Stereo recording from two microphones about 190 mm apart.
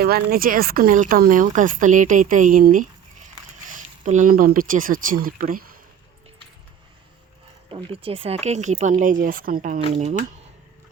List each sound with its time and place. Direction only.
0.0 s speech: 55° right (ahead or behind)
7.7 s speech: 25° right (ahead or behind)